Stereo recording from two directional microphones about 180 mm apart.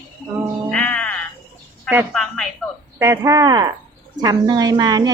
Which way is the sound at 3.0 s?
15° right (ahead or behind).